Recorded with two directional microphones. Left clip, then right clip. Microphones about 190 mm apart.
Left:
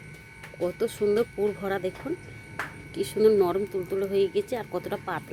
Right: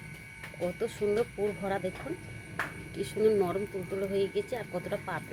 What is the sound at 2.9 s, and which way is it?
Speech, 50° left (ahead or behind).